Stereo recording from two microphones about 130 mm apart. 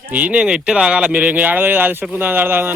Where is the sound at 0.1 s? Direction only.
10° right (ahead or behind).